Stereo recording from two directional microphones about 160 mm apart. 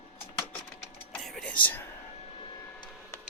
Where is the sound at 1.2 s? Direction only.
5° left (ahead or behind).